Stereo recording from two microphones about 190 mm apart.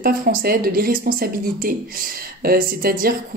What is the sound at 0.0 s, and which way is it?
Speech, 45° right (ahead or behind).